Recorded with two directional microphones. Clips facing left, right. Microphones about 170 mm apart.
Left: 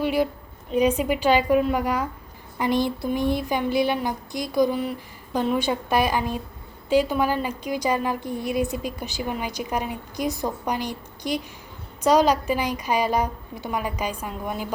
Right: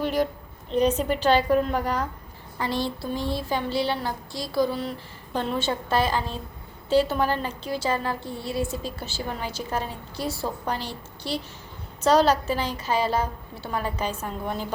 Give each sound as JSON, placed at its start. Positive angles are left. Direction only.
{"t": 0.0, "sound": "a woman's voice", "side_deg": 10}